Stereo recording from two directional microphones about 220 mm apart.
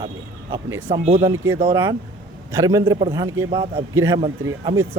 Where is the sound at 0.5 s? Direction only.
20° right (ahead or behind).